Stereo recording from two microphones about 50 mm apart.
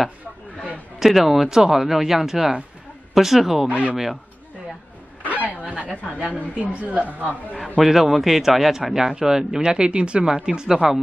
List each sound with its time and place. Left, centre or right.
0.9 s speech: centre
3.6 s speech: right
3.9 s a man's voice: centre
5.9 s a man's voice: centre
7.5 s a man's voice: centre